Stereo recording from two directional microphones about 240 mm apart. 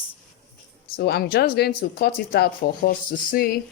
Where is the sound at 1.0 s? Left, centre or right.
Left.